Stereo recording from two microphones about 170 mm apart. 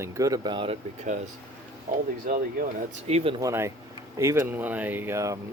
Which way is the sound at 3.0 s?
40° right (ahead or behind).